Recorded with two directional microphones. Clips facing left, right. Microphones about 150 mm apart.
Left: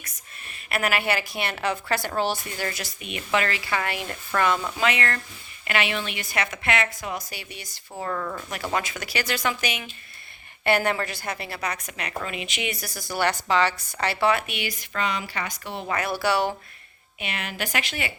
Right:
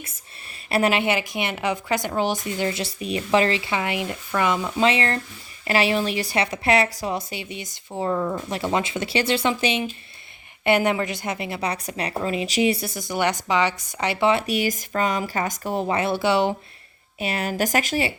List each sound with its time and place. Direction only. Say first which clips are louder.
0.7 s a woman's voice: right 5 dB; 30° right (ahead or behind)
4.8 s speech: right 4 dB; 30° right (ahead or behind)
14.4 s speech: right 9 dB; 40° right (ahead or behind)
15.9 s speech: right 2 dB; 25° right (ahead or behind)
17.2 s a woman's voice: right 8 dB; 40° right (ahead or behind)